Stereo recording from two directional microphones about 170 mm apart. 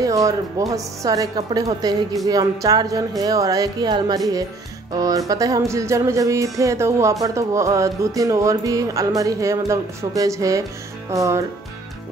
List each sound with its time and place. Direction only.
0.0 s speech: 20° right (ahead or behind)